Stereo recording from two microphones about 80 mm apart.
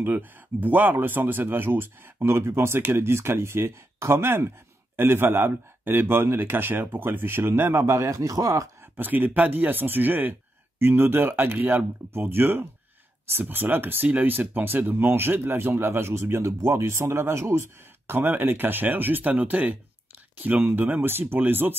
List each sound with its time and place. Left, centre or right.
0.0 s speech: right
8.9 s speech: right